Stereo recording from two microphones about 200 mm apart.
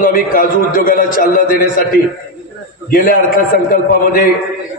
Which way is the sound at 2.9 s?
45° left (ahead or behind).